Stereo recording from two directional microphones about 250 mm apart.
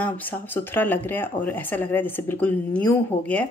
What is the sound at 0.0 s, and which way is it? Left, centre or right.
Speech, centre.